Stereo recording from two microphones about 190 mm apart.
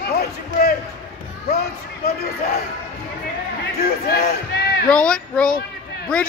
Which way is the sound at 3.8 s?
55° left (ahead or behind).